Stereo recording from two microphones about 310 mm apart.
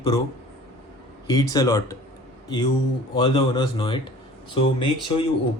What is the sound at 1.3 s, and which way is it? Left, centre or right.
Speech, centre.